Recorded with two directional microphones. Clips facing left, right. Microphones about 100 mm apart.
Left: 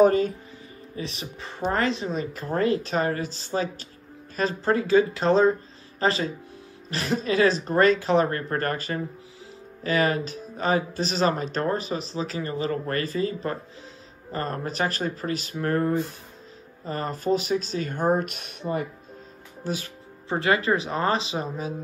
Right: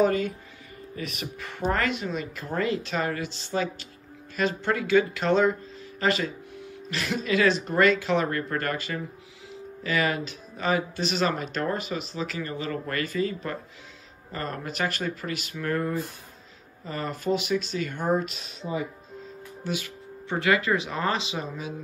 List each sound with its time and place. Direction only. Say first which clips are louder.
0.0 s speech: left 5 dB; 35° left (ahead or behind); by 18.9 s 55° left (ahead or behind)
19.6 s speech: left 1 dB; 35° left (ahead or behind)